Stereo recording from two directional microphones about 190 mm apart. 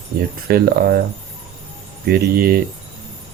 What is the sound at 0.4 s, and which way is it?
Speech, 50° right (ahead or behind).